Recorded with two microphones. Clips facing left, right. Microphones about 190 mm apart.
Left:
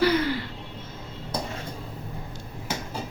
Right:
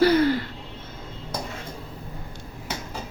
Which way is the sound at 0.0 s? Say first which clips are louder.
Right 4 dB; 45° right (ahead or behind).